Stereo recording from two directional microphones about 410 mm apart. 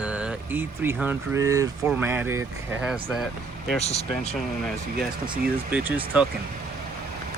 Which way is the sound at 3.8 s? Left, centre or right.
Centre.